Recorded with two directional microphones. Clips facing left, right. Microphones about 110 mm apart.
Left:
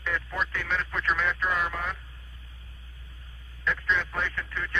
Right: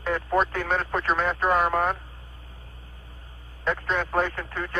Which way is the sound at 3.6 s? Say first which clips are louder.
Right 2 dB; 45° right (ahead or behind).